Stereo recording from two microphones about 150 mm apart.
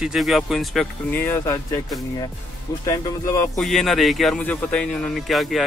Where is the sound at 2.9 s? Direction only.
20° left (ahead or behind).